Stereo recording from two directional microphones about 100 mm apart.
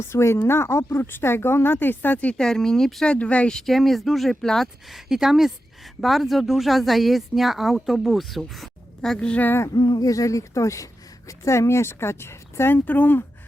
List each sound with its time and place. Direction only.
0.0 s speech: 25° left (ahead or behind)
9.6 s speech: 40° left (ahead or behind); by 13.2 s 20° left (ahead or behind)